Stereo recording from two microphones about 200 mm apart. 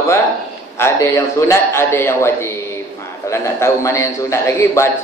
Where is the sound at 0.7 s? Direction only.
15° left (ahead or behind).